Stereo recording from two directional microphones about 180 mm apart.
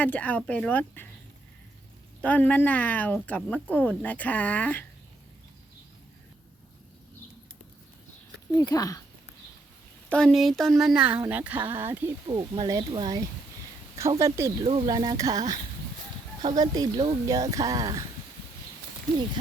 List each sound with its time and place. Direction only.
0.0 s speech: 10° left (ahead or behind)
2.2 s speech: 10° left (ahead or behind)
8.5 s speech: 20° left (ahead or behind)
10.1 s speech: 5° left (ahead or behind); by 14.5 s 15° right (ahead or behind)
14.6 s speech: 30° right (ahead or behind)
16.6 s speech: 20° right (ahead or behind)